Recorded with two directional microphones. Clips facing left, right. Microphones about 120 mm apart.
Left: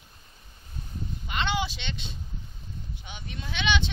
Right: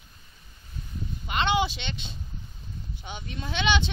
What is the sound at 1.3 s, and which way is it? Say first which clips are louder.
Speech: right 4 dB; 20° right (ahead or behind).